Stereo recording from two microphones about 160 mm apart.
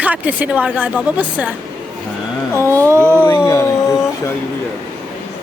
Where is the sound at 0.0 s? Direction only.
10° right (ahead or behind).